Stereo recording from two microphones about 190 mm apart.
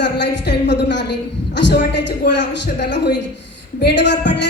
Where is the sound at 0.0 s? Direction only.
65° left (ahead or behind).